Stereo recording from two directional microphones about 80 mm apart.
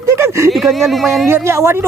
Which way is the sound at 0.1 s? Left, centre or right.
Right.